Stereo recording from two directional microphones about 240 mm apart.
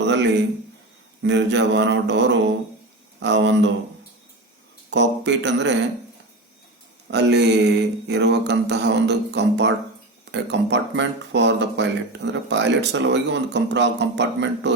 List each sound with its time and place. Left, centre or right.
0.0 s a sound: right
1.2 s speech: right
4.9 s speech: right
7.1 s speech: right